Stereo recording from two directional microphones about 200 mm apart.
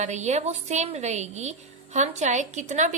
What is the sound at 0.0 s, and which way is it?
A woman's voice, 35° right (ahead or behind).